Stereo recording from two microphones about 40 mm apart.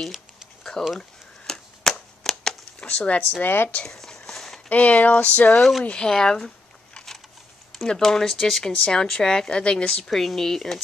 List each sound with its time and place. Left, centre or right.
0.8 s speech: centre
1.8 s cap gun: centre
2.8 s speech: left
3.2 s speech: left
3.8 s a sound: centre
4.6 s a sound: left
5.6 s speech: centre
5.9 s a sound: centre
7.9 s speech: centre
8.9 s a woman's voice: centre
10.0 s speech: centre